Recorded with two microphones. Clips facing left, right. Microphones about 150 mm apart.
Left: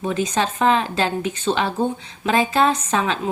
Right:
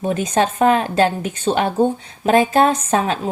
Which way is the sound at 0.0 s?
50° right (ahead or behind).